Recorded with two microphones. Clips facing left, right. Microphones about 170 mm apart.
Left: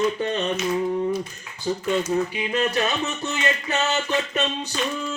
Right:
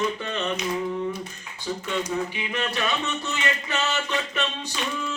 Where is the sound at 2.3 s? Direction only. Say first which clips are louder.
Left 5 dB; 40° left (ahead or behind).